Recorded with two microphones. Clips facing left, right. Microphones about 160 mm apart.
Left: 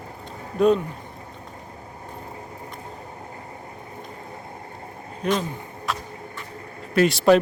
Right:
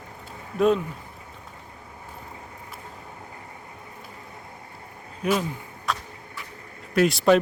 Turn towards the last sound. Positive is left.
turn(degrees=0)  # may be behind; listen again after turning